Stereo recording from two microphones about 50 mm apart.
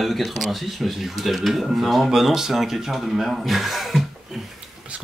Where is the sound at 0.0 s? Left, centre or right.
Centre.